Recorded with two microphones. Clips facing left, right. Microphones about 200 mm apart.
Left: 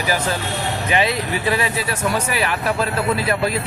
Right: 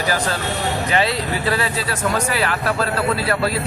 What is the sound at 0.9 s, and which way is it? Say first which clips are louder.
Speech: left 2 dB; 15° left (ahead or behind).